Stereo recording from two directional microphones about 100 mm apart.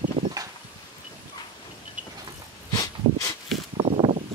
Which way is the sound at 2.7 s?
35° left (ahead or behind).